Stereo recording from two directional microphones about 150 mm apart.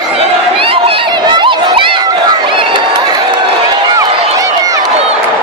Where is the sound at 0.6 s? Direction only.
35° right (ahead or behind).